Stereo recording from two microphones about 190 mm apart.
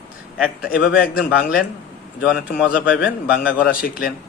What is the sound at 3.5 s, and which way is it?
Speech, 50° left (ahead or behind).